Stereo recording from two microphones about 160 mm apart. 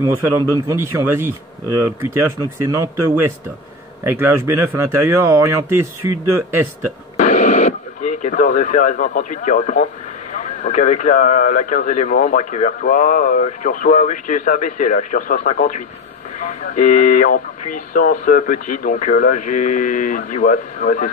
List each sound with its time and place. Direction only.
0.7 s speech: 15° right (ahead or behind)
4.0 s speech: 15° right (ahead or behind)
7.2 s radio: 50° left (ahead or behind)
10.3 s speech: 50° left (ahead or behind)